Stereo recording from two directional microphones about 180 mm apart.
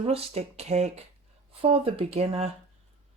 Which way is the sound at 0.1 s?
35° right (ahead or behind).